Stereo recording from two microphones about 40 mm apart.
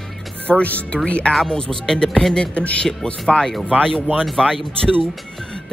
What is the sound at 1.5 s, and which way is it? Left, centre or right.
Speech, centre.